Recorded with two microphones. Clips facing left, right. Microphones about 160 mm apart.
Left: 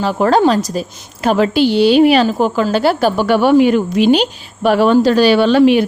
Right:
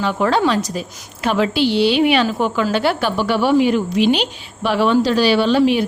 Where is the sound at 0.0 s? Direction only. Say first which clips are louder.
Left 5 dB; 40° left (ahead or behind).